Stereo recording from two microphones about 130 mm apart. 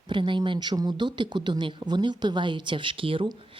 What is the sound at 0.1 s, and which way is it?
Speech, 40° right (ahead or behind).